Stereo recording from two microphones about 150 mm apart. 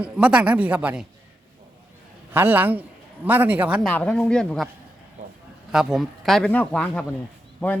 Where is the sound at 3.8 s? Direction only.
5° left (ahead or behind).